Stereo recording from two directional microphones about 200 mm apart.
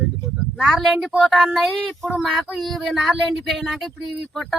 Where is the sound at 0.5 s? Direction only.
Centre (ahead or behind).